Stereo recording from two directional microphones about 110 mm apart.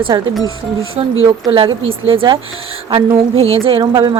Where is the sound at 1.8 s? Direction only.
55° right (ahead or behind).